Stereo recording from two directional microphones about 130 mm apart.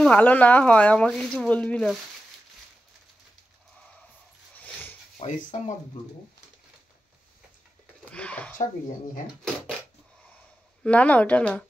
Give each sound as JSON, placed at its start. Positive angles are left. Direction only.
{"t": 0.0, "sound": "speech", "side_deg": 10}
{"t": 4.6, "sound": "dog", "side_deg": 10}
{"t": 5.2, "sound": "speech", "side_deg": 55}
{"t": 8.1, "sound": "speech", "side_deg": 10}
{"t": 10.8, "sound": "speech", "side_deg": 10}